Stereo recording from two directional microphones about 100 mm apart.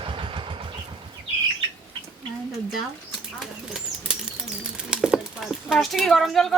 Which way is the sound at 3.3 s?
5° right (ahead or behind).